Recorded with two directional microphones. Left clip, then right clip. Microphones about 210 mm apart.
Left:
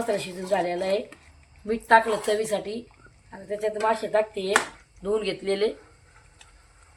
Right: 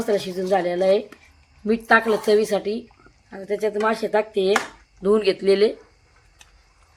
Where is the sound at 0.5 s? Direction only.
55° right (ahead or behind).